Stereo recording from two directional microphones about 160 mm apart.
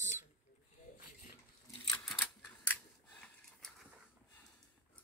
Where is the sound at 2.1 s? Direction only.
5° left (ahead or behind).